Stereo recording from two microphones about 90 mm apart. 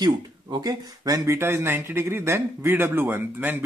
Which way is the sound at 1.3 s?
30° right (ahead or behind).